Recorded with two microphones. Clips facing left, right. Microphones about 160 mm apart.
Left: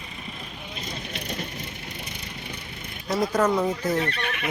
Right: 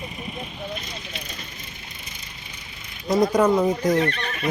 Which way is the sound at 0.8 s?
55° left (ahead or behind).